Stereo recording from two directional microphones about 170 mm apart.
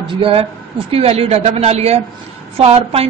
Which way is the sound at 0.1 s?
30° right (ahead or behind).